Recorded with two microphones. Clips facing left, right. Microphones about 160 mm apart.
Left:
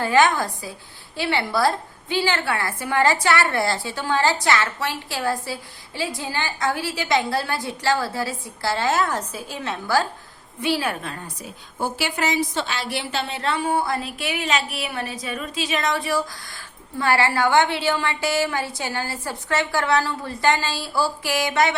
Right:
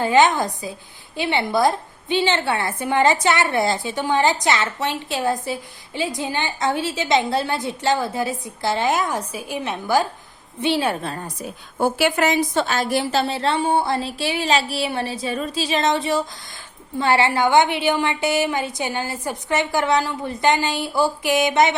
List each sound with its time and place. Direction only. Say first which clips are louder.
0.0 s a woman's voice: right 2 dB; 20° right (ahead or behind)
11.8 s a woman's voice: right 6 dB; 60° right (ahead or behind); by 21.8 s 20° right (ahead or behind)